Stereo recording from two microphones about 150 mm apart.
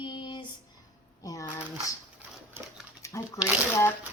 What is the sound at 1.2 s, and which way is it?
Speech, 20° left (ahead or behind).